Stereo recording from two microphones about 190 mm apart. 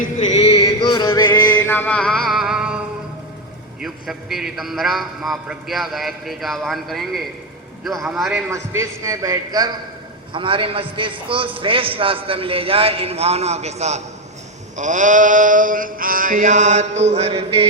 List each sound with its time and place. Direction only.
0.0 s music: 40° left (ahead or behind); by 1.6 s 20° left (ahead or behind)
1.6 s music: 10° left (ahead or behind)
3.8 s a man's voice: centre (ahead or behind)
8.5 s a man's voice: 15° right (ahead or behind); by 14.0 s 35° right (ahead or behind)
14.8 s mantra: 40° right (ahead or behind)